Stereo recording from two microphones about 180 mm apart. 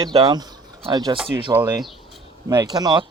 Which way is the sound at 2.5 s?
20° right (ahead or behind).